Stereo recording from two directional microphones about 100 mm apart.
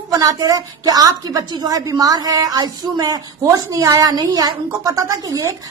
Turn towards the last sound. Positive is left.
turn(degrees=-35)  # may be behind; listen again after turning